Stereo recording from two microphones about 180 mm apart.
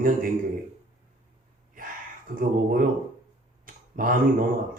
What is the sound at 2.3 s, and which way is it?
Speech, 50° right (ahead or behind).